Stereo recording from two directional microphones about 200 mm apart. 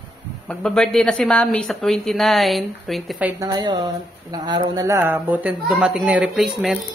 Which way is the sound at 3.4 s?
20° right (ahead or behind).